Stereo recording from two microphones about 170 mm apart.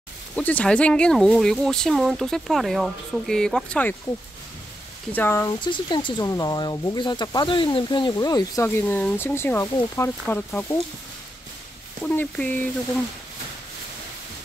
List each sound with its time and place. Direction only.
0.4 s speech: 10° left (ahead or behind)
5.1 s speech: 15° left (ahead or behind)
5.6 s speech: 25° left (ahead or behind)
8.6 s speech: 10° left (ahead or behind)
12.0 s speech: 10° left (ahead or behind)